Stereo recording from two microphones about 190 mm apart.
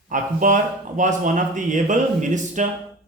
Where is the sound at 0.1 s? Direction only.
45° right (ahead or behind).